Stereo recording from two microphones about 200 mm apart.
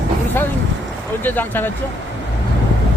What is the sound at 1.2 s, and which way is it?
Speech, 10° left (ahead or behind).